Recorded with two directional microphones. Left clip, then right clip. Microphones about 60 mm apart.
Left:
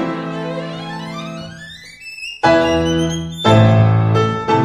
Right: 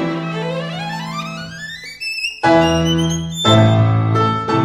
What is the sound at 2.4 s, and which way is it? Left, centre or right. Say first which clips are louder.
Music: left 1 dB; right.